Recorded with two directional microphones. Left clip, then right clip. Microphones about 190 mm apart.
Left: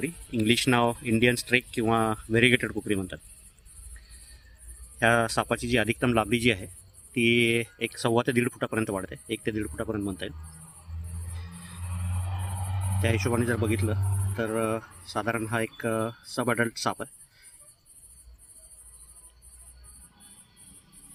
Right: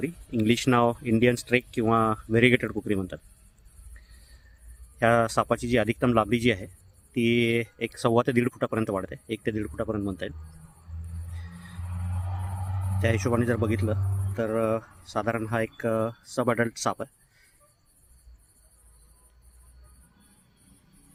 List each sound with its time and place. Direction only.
0.0 s speech: 30° right (ahead or behind)
4.9 s speech: 35° right (ahead or behind)
11.9 s music: 10° left (ahead or behind)
13.0 s speech: 40° right (ahead or behind)